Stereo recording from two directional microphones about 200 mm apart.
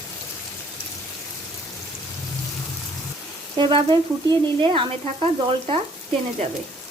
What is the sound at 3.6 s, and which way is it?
Speech, 25° right (ahead or behind).